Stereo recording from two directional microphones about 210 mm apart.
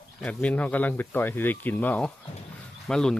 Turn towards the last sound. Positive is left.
turn(degrees=5)  # may be behind; listen again after turning